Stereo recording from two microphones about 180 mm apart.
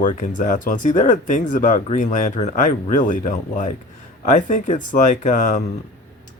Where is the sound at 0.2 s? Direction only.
45° left (ahead or behind).